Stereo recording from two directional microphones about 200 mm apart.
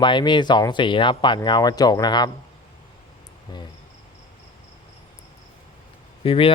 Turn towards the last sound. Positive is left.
turn(degrees=30)  # may be behind; listen again after turning